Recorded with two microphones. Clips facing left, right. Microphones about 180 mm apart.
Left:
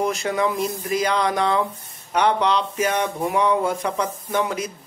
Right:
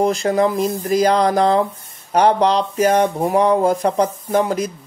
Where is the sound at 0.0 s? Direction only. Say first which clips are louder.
Right 6 dB; 35° right (ahead or behind).